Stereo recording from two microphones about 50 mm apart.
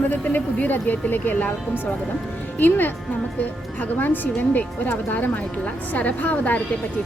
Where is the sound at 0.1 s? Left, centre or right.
Left.